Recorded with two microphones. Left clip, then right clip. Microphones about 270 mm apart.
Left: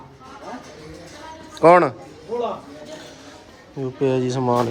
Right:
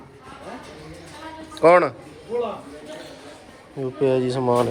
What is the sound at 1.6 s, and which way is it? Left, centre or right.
Speech, centre.